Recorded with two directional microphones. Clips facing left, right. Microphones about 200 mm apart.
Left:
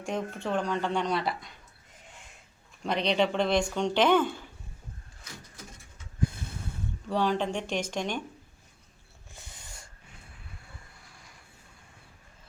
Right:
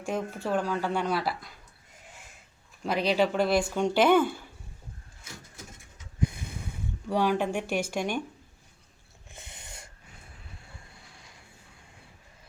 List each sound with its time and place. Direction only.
0.0 s speech: 5° right (ahead or behind)
2.8 s speech: 5° right (ahead or behind)
6.1 s snort: 15° right (ahead or behind)
7.1 s speech: 10° right (ahead or behind)
9.3 s snort: 20° right (ahead or behind)